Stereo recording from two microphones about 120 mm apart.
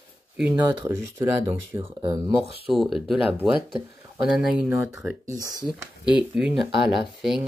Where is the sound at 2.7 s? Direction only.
Centre (ahead or behind).